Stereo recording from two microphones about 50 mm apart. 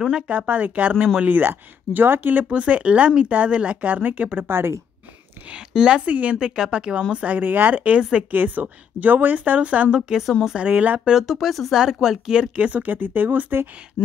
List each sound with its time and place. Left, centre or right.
0.3 s speech: right
1.5 s speech: right
2.5 s speech: right
4.5 s a woman's voice: right
5.7 s speech: centre
6.5 s speech: centre
8.0 s speech: centre
8.3 s speech: right; by 10.2 s centre
10.6 s speech: right
11.2 s speech: centre
12.5 s speech: right
14.0 s a sound: left